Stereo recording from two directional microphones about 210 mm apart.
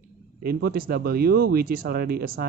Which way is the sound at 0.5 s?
45° right (ahead or behind).